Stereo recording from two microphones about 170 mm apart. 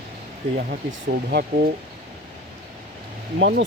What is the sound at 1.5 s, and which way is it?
Speech, 55° right (ahead or behind).